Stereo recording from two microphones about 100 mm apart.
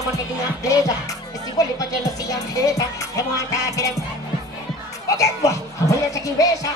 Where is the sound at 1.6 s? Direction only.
35° left (ahead or behind).